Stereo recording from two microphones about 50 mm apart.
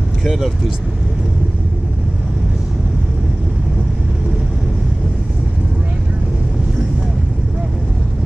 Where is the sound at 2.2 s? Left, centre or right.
Centre.